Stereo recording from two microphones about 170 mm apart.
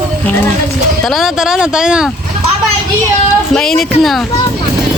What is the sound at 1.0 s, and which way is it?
Speech, centre (ahead or behind).